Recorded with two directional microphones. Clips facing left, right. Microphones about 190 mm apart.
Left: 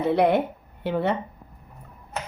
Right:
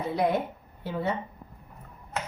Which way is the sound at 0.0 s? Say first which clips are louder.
Left 6 dB; 70° left (ahead or behind).